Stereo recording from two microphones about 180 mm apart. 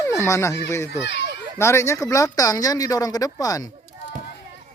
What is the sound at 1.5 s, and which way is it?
Speech, 15° left (ahead or behind).